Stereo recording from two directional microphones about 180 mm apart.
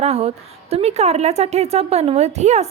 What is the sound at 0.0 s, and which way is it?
A woman's voice, 35° right (ahead or behind).